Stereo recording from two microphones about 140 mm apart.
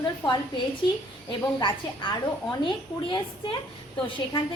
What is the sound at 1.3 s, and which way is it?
A woman's voice, 35° left (ahead or behind).